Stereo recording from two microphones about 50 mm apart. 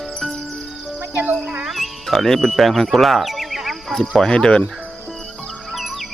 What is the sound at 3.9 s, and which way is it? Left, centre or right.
Speech, centre.